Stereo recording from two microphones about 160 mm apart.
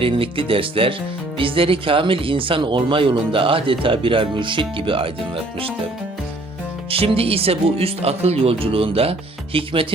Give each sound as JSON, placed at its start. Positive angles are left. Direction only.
{"t": 0.0, "sound": "speech", "side_deg": -35}
{"t": 6.9, "sound": "speech", "side_deg": -35}